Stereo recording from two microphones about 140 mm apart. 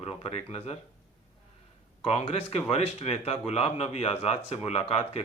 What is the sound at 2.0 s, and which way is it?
Speech, 45° left (ahead or behind).